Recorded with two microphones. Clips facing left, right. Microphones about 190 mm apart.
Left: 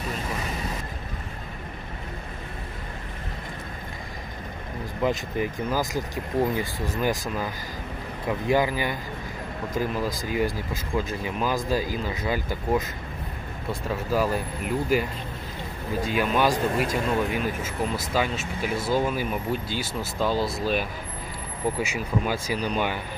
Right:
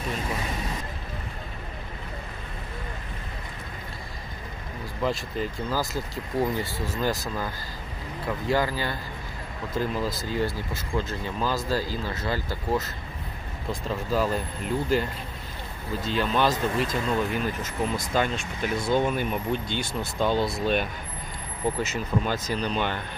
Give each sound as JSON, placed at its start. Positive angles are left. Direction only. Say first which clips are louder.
{"t": 5.0, "sound": "speech", "louder": "left 2 dB", "side_deg": 15}